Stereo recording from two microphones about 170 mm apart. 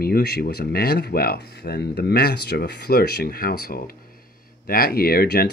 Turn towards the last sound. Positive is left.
turn(degrees=65)  # may be behind; listen again after turning